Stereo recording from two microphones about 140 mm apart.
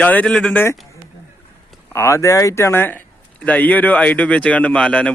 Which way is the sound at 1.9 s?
20° left (ahead or behind).